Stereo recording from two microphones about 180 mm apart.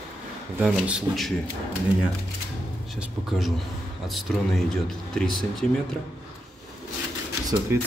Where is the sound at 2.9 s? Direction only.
Centre (ahead or behind).